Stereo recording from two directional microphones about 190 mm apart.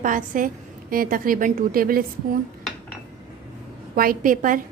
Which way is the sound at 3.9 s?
50° right (ahead or behind).